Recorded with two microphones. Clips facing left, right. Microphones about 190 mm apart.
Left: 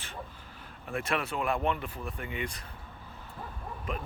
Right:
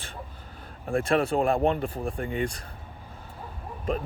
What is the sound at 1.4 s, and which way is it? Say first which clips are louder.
Speech: right 7 dB; 45° right (ahead or behind).